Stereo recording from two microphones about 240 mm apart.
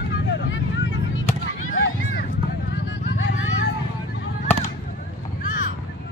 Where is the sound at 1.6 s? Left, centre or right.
Left.